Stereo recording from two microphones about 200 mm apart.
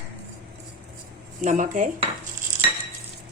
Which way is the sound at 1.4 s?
40° right (ahead or behind).